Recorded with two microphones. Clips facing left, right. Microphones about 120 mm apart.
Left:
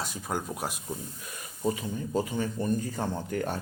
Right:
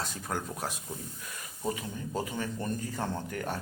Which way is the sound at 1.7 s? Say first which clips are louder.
Left 4 dB; 25° left (ahead or behind).